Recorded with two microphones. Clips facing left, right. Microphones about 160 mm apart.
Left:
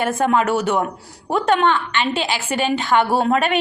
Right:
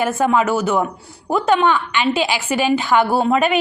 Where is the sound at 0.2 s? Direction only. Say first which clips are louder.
Even; 5° right (ahead or behind).